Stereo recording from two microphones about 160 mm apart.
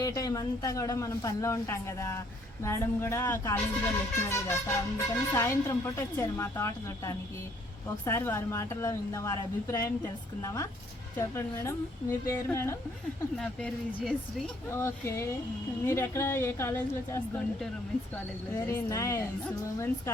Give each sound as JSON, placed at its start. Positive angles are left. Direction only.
{"t": 0.0, "sound": "speech", "side_deg": 20}
{"t": 13.3, "sound": "speech", "side_deg": 5}
{"t": 14.7, "sound": "speech", "side_deg": 15}